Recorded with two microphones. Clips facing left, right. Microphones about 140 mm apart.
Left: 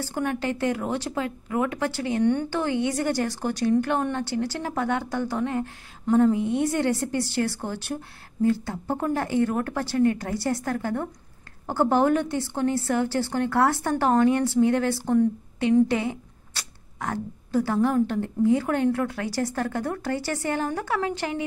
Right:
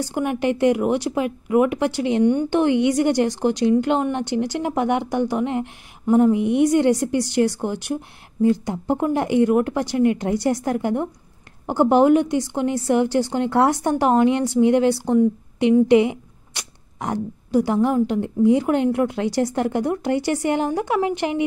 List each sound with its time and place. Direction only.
0.0 s speech: 15° right (ahead or behind)